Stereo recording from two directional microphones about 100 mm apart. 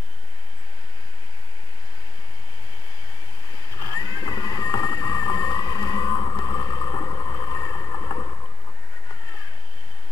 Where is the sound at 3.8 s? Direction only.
40° left (ahead or behind).